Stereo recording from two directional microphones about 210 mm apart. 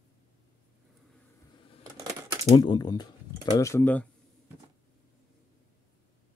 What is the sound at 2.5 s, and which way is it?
Speech, 20° left (ahead or behind).